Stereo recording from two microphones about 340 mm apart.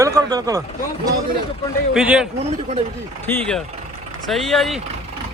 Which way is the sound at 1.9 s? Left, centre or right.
Centre.